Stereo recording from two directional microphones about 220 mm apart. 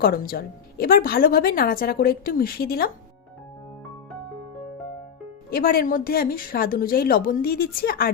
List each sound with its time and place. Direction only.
0.0 s speech: 40° left (ahead or behind)
5.5 s a woman's voice: 45° left (ahead or behind)